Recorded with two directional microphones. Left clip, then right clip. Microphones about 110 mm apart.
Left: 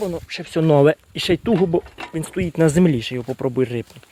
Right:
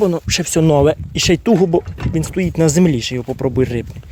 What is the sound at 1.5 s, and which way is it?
Speech, 50° right (ahead or behind).